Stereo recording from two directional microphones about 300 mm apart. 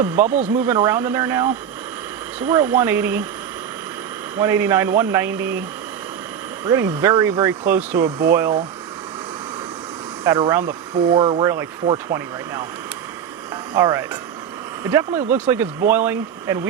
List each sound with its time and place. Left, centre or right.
0.3 s speech: right
0.6 s speech: centre
4.4 s speech: centre
6.7 s speech: centre
10.2 s speech: centre
13.7 s speech: centre